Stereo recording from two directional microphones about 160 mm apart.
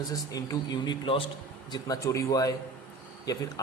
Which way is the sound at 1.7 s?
20° left (ahead or behind).